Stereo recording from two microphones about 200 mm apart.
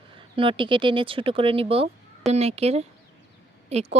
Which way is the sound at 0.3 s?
25° right (ahead or behind).